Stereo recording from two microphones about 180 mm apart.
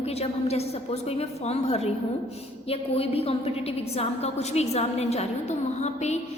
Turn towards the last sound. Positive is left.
turn(degrees=40)  # may be behind; listen again after turning